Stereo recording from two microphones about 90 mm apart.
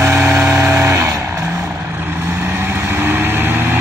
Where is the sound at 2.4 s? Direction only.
25° right (ahead or behind).